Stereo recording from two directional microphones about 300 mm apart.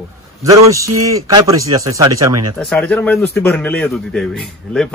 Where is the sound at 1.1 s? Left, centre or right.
Centre.